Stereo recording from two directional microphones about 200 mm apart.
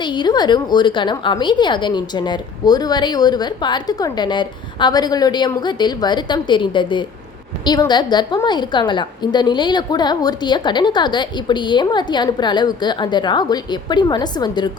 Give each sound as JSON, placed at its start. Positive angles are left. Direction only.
{"t": 0.0, "sound": "a woman's voice", "side_deg": 20}